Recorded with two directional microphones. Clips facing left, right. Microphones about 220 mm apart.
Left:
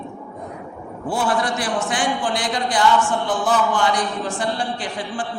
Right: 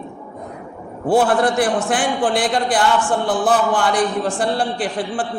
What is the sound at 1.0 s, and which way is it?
A man's voice, 55° right (ahead or behind).